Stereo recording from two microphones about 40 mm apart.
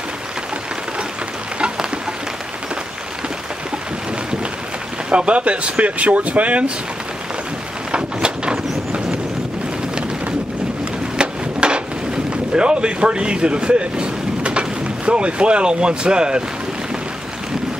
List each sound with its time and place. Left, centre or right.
5.1 s speech: right
7.9 s a sound: right
11.1 s wood: right
12.5 s speech: right